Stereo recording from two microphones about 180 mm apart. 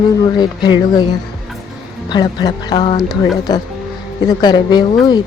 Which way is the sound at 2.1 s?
25° left (ahead or behind).